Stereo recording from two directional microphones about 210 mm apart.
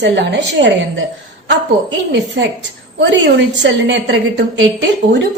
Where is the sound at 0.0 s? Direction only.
55° right (ahead or behind).